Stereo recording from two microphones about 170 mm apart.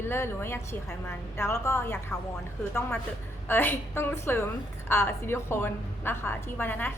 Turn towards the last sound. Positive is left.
turn(degrees=10)  # may be behind; listen again after turning